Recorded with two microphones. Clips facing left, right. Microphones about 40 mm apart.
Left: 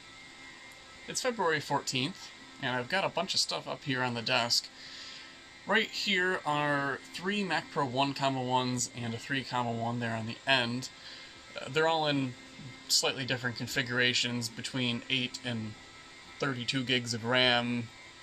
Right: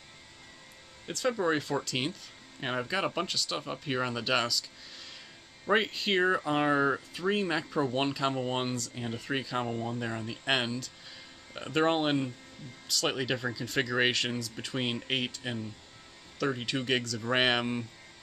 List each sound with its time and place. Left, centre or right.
1.0 s speech: centre
5.7 s speech: centre